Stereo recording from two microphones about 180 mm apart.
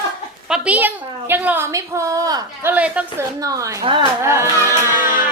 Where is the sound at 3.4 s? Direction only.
20° right (ahead or behind).